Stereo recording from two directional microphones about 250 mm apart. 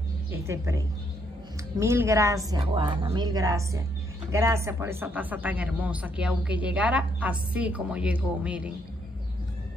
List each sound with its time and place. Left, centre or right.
0.3 s a woman's voice: centre